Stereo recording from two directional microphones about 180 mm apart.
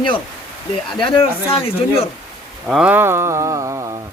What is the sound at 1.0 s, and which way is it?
Speech, 30° left (ahead or behind).